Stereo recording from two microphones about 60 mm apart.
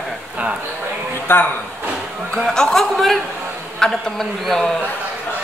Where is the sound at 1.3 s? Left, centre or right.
Left.